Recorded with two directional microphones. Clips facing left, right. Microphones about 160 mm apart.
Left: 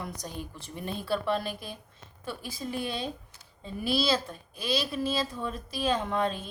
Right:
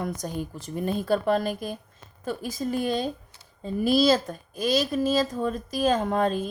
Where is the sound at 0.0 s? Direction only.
50° right (ahead or behind).